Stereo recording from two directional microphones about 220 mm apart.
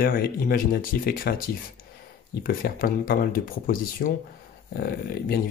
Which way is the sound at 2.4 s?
40° left (ahead or behind).